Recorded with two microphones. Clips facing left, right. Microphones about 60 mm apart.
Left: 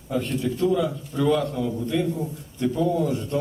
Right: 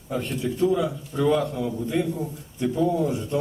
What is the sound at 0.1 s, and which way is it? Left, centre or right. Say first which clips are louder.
A man's voice: left 2 dB; centre.